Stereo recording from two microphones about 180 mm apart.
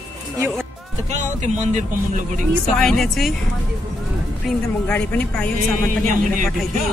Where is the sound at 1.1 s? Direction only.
40° right (ahead or behind).